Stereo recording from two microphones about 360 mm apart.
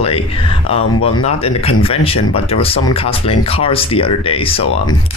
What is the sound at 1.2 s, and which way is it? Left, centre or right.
Speech, centre.